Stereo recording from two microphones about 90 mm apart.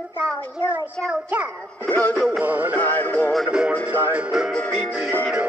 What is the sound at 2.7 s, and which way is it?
Synthetic singing, 20° left (ahead or behind).